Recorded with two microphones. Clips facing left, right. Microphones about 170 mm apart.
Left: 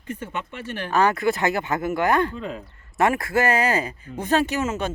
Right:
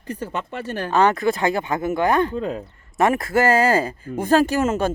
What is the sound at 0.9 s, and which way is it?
Speech, 20° right (ahead or behind).